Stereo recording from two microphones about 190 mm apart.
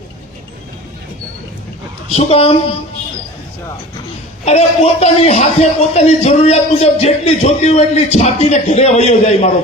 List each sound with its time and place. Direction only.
2.1 s a man's voice: 30° left (ahead or behind)
4.4 s a man's voice: 35° left (ahead or behind)